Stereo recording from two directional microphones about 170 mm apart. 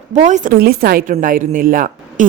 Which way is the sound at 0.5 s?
65° right (ahead or behind).